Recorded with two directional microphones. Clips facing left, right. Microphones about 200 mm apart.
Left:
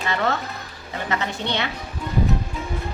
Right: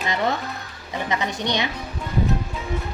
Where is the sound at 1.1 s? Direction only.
15° right (ahead or behind).